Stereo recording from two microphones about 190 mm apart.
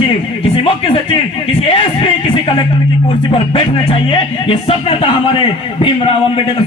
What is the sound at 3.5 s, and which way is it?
Speech, 30° left (ahead or behind).